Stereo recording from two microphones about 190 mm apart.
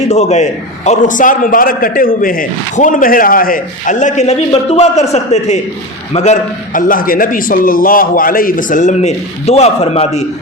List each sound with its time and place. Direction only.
0.1 s a man's voice: 35° left (ahead or behind)